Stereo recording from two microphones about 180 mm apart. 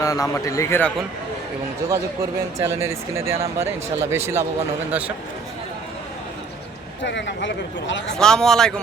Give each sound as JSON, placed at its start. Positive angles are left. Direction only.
{"t": 0.0, "sound": "a man's voice", "side_deg": 20}
{"t": 2.6, "sound": "speech", "side_deg": -15}
{"t": 7.0, "sound": "speech", "side_deg": 80}
{"t": 8.2, "sound": "speech", "side_deg": 5}